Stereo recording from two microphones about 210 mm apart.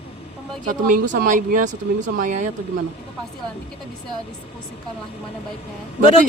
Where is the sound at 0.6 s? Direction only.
40° right (ahead or behind).